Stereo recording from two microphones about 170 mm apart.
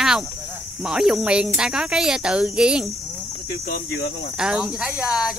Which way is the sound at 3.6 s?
60° left (ahead or behind).